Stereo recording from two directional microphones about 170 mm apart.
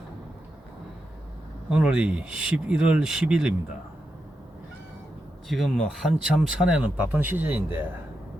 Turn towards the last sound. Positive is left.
turn(degrees=-10)  # may be behind; listen again after turning